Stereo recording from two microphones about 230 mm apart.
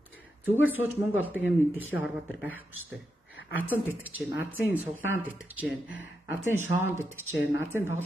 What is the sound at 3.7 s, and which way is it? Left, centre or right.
Speech, centre.